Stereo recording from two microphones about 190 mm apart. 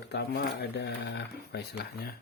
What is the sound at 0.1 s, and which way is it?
Speech, 60° left (ahead or behind).